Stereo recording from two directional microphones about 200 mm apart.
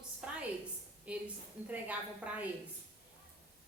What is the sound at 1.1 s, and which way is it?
A woman's voice, 5° right (ahead or behind).